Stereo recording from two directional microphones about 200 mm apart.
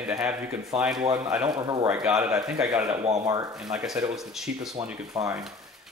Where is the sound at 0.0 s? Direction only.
5° right (ahead or behind).